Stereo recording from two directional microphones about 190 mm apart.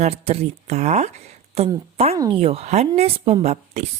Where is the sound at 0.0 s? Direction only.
35° right (ahead or behind).